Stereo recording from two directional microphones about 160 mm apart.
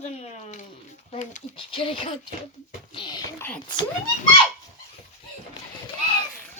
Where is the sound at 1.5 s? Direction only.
30° left (ahead or behind).